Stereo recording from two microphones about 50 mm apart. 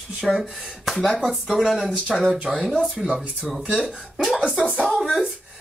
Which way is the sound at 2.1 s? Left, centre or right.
Centre.